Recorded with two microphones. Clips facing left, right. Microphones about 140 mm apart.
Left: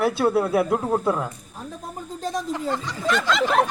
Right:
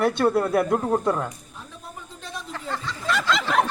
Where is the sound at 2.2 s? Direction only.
40° left (ahead or behind).